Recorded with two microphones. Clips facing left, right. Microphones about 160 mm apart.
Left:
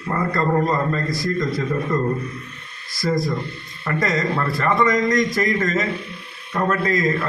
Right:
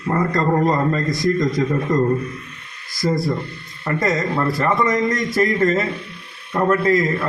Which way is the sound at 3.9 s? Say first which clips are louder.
Right 1 dB; 25° right (ahead or behind).